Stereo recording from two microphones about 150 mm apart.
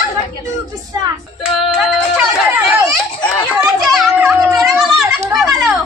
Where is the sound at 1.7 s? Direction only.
Centre (ahead or behind).